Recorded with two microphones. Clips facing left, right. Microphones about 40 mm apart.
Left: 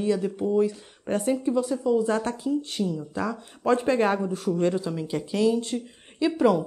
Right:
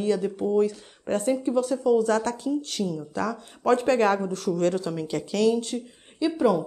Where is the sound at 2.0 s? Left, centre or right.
Left.